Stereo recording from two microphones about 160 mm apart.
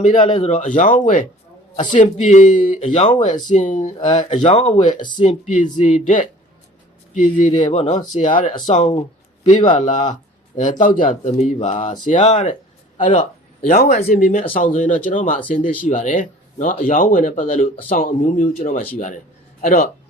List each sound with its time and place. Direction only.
0.2 s speech: 35° left (ahead or behind)
0.5 s speech: 50° left (ahead or behind)
8.9 s a sound: 30° left (ahead or behind)
9.5 s speech: 50° left (ahead or behind)